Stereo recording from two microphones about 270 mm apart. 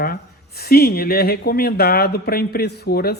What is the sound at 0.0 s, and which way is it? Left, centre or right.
Speech, left.